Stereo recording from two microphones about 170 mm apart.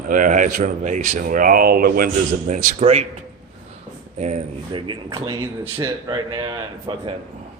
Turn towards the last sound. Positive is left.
turn(degrees=-30)  # may be behind; listen again after turning